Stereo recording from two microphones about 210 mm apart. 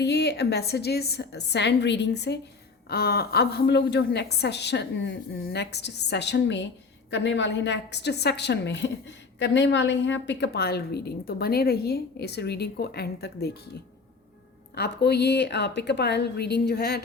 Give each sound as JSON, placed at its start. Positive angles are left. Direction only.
{"t": 0.0, "sound": "a woman's voice", "side_deg": 50}
{"t": 14.8, "sound": "a woman's voice", "side_deg": 50}